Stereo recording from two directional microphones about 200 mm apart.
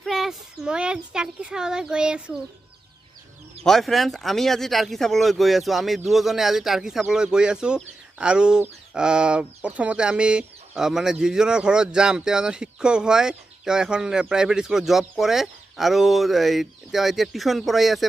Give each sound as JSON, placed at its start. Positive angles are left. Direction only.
{"t": 0.0, "sound": "a child's voice", "side_deg": 0}
{"t": 3.6, "sound": "speech", "side_deg": 0}